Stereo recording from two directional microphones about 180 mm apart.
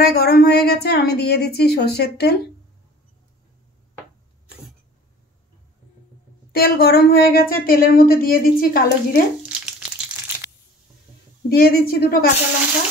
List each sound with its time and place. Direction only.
0.0 s speech: 55° left (ahead or behind)
6.5 s speech: 60° left (ahead or behind)
9.5 s a sound: 5° right (ahead or behind)
11.4 s speech: 60° left (ahead or behind)